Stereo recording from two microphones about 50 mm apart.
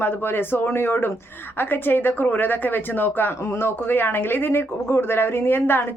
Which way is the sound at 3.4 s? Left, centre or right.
Left.